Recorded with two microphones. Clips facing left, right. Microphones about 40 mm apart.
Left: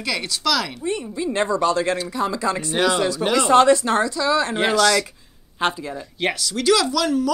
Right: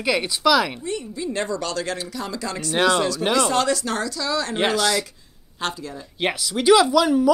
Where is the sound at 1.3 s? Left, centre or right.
Left.